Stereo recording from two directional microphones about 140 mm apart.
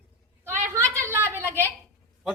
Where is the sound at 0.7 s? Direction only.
20° right (ahead or behind).